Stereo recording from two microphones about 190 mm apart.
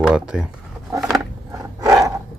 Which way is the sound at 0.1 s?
5° right (ahead or behind).